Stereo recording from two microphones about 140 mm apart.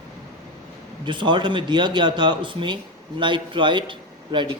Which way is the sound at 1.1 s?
35° right (ahead or behind).